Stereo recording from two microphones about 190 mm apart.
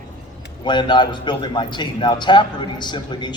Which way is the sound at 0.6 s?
25° left (ahead or behind).